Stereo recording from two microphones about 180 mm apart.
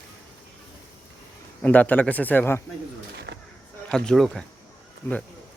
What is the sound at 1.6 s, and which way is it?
Speech, 10° left (ahead or behind).